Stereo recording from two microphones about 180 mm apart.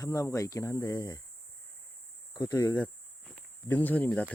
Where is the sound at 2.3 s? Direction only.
20° left (ahead or behind).